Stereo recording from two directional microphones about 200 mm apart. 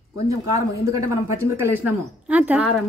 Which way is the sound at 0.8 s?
15° right (ahead or behind).